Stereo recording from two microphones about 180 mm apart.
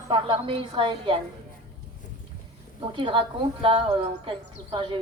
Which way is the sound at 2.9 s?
25° right (ahead or behind).